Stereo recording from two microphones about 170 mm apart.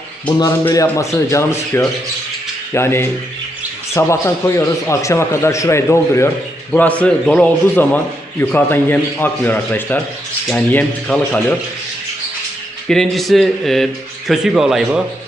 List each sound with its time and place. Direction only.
0.6 s a man's voice: 20° left (ahead or behind)
12.9 s speech: centre (ahead or behind)